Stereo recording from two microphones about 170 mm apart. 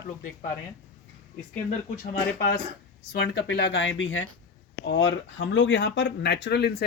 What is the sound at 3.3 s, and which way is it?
Speech, 85° left.